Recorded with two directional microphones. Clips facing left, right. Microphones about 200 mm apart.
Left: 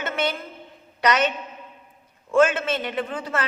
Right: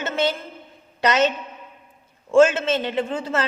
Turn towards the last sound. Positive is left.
turn(degrees=-25)  # may be behind; listen again after turning